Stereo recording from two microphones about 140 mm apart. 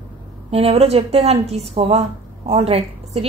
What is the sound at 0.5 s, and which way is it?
A woman's voice, 45° right (ahead or behind).